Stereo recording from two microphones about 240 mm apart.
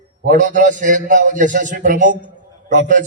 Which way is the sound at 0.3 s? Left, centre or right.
Right.